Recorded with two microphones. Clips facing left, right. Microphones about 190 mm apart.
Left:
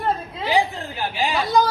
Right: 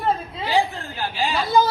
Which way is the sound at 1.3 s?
Centre (ahead or behind).